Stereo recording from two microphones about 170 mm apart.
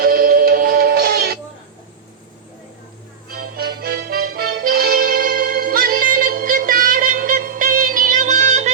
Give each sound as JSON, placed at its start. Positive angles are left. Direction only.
{"t": 0.0, "sound": "music", "side_deg": -60}
{"t": 3.3, "sound": "music", "side_deg": -60}